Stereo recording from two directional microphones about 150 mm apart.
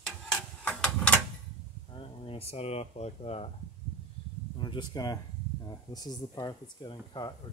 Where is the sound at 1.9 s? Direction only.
40° left (ahead or behind).